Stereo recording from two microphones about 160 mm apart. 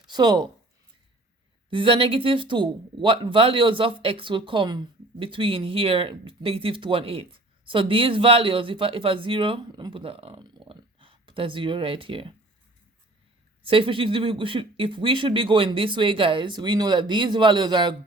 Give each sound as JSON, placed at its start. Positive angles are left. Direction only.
{"t": 0.1, "sound": "speech", "side_deg": -25}
{"t": 1.7, "sound": "speech", "side_deg": -35}
{"t": 13.7, "sound": "speech", "side_deg": -35}